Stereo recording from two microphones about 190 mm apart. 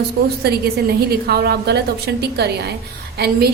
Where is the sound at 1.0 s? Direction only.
55° right (ahead or behind).